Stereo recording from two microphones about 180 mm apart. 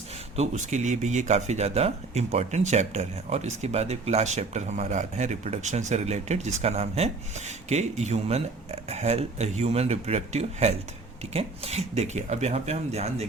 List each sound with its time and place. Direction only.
0.3 s speech: 40° right (ahead or behind)